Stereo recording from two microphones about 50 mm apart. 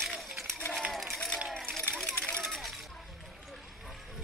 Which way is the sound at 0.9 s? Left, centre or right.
Centre.